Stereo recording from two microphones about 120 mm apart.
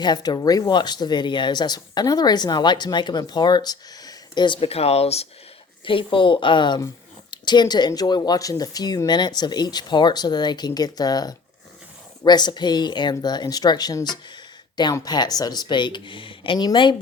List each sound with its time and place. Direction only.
0.0 s speech: 35° left (ahead or behind); by 5.3 s 60° left (ahead or behind)
5.8 s a woman's voice: 45° left (ahead or behind)